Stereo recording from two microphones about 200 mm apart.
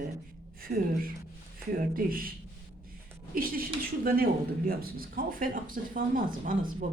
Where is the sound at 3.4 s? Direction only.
45° right (ahead or behind).